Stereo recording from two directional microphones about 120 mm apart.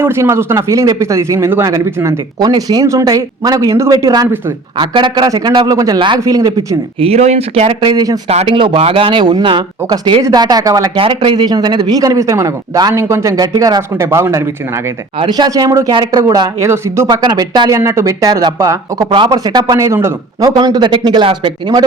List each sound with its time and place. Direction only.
0.0 s speech: 20° right (ahead or behind)
7.0 s speech: 60° right (ahead or behind)
7.8 s speech: 40° right (ahead or behind)
8.3 s speech: 60° right (ahead or behind)
8.5 s speech: 45° right (ahead or behind)
10.9 s speech: 50° right (ahead or behind); by 14.4 s 25° right (ahead or behind)
15.2 s speech: 35° right (ahead or behind)
17.1 s speech: 35° right (ahead or behind)
20.4 s speech: 35° right (ahead or behind)